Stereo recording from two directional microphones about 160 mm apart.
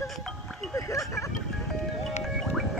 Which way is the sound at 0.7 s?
20° left (ahead or behind).